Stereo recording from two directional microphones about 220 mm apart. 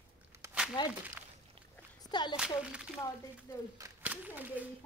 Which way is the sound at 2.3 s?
5° right (ahead or behind).